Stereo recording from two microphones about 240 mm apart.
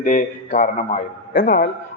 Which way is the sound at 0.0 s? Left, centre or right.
Left.